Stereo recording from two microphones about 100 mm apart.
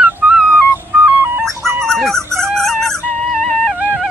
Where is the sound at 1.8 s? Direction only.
5° left (ahead or behind).